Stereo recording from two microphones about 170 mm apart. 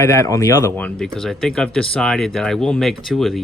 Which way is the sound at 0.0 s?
15° left (ahead or behind).